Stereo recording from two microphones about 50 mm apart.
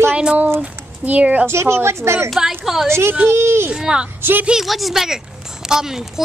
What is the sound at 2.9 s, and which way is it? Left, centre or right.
Speech, right.